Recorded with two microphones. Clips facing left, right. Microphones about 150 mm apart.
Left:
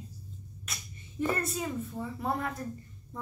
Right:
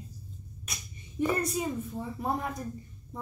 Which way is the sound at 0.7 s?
15° right (ahead or behind).